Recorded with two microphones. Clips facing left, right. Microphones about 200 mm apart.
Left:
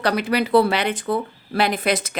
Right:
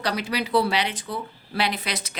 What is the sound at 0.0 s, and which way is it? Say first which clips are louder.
Speech: left 6 dB; 55° left (ahead or behind).